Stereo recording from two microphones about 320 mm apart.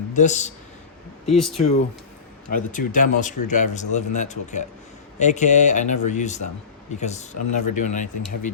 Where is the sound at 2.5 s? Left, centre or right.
Left.